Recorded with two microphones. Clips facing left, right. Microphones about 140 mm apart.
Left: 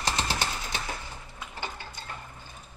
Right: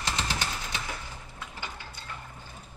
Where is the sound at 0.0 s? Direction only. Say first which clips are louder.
Left 2 dB; 30° left (ahead or behind).